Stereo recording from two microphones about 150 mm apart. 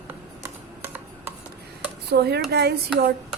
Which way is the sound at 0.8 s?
15° right (ahead or behind).